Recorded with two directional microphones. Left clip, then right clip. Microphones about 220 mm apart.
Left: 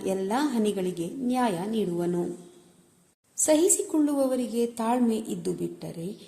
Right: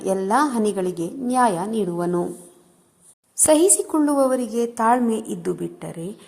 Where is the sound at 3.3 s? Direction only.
20° right (ahead or behind).